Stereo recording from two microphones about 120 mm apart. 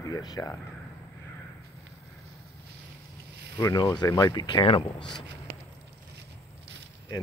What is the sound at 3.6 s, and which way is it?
Speech, 25° left (ahead or behind).